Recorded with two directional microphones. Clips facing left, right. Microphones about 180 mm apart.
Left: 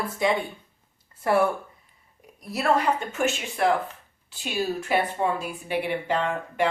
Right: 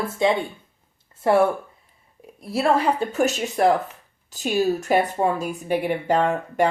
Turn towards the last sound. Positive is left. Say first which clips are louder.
# right 5 dB
turn(degrees=-45)  # may be behind; listen again after turning